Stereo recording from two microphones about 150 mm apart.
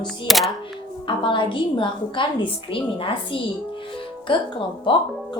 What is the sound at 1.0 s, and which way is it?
Speech, 35° left (ahead or behind).